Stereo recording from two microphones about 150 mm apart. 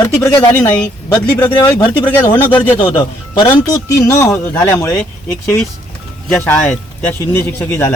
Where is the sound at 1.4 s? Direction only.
25° left (ahead or behind).